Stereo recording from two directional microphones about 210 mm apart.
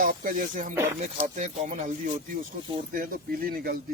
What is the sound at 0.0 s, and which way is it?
Speech, 40° right (ahead or behind).